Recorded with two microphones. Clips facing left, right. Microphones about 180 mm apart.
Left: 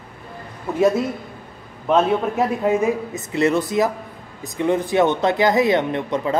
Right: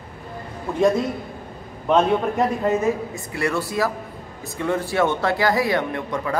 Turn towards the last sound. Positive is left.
turn(degrees=20)  # may be behind; listen again after turning